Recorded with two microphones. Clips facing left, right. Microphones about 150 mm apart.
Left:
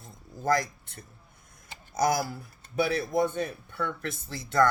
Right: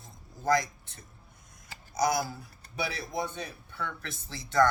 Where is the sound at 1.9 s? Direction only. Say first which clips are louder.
Left 2 dB; 55° left (ahead or behind).